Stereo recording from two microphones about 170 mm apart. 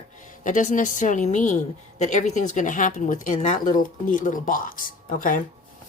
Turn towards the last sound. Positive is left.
turn(degrees=55)  # may be behind; listen again after turning